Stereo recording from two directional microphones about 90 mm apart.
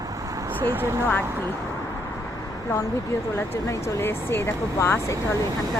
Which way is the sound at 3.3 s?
25° left (ahead or behind).